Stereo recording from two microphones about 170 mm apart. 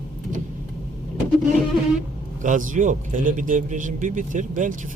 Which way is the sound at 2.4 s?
50° right (ahead or behind).